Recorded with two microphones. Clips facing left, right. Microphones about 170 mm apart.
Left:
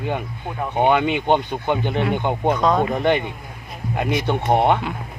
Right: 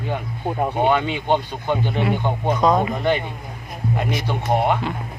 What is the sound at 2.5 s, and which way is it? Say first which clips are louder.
Speech: right 3 dB; 10° right (ahead or behind).